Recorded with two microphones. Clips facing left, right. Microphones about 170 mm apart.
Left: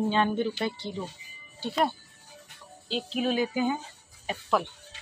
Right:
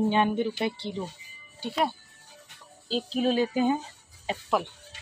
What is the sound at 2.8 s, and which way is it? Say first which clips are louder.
Music: right 3 dB; 35° right (ahead or behind).